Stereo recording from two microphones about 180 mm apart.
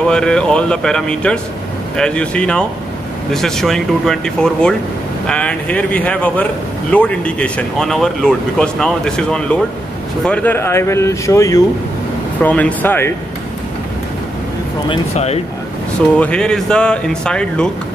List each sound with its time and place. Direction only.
0.0 s speech: 5° left (ahead or behind)
14.9 s speech: 35° left (ahead or behind)
16.2 s speech: 5° left (ahead or behind)